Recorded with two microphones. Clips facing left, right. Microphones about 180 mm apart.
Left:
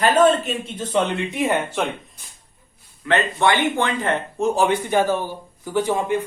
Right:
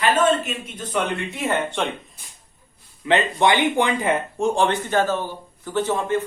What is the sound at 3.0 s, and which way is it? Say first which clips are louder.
Speech: right 1 dB; 15° right (ahead or behind).